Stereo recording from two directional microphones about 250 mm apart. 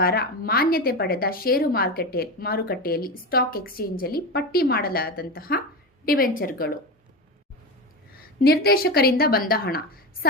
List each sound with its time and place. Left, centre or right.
0.0 s a woman's voice: left
8.4 s a woman's voice: left